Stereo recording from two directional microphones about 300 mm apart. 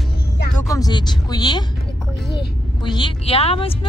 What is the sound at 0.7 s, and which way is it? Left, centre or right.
Speech, centre.